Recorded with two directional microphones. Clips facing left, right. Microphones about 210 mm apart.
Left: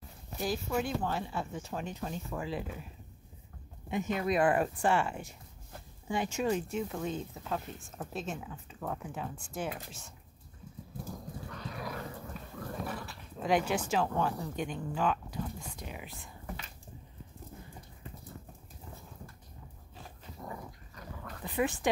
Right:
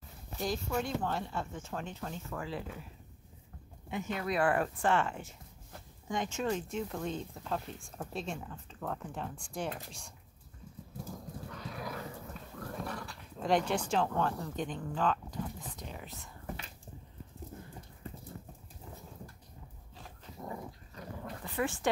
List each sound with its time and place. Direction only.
0.4 s speech: 5° left (ahead or behind)
3.9 s speech: 20° left (ahead or behind); by 10.1 s 5° left (ahead or behind)
11.1 s dog: centre (ahead or behind)
15.8 s whispering: 10° left (ahead or behind)
20.4 s dog: 25° right (ahead or behind)
21.5 s speech: 15° left (ahead or behind)